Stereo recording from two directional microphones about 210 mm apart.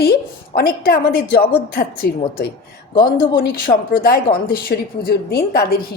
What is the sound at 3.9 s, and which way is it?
A woman's voice, 45° left (ahead or behind).